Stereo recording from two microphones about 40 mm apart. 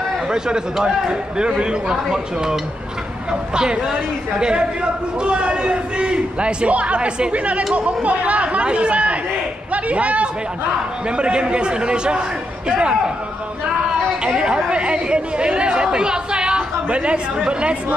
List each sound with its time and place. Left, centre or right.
0.3 s a man's voice: centre
3.3 s a man's voice: right
14.3 s a man's voice: right